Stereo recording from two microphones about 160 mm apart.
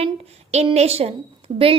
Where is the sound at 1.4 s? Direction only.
35° right (ahead or behind).